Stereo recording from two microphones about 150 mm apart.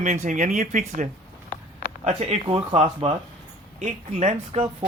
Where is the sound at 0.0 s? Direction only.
55° right (ahead or behind).